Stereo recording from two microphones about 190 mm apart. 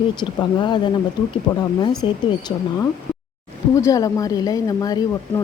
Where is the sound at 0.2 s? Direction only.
25° left (ahead or behind).